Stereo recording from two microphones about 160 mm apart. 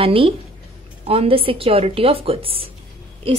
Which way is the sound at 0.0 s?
35° right (ahead or behind).